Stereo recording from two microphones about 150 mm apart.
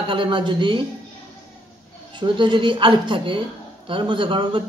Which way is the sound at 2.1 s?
30° right (ahead or behind).